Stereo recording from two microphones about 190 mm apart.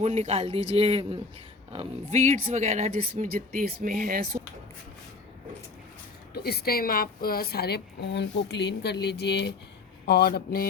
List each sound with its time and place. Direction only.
0.0 s a man's voice: 35° right (ahead or behind); by 4.4 s 55° right (ahead or behind)
6.3 s a woman's voice: 55° left (ahead or behind)